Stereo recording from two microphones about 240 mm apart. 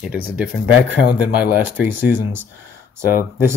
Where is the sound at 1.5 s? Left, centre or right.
Centre.